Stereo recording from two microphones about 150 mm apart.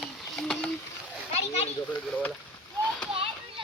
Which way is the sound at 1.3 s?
45° left (ahead or behind).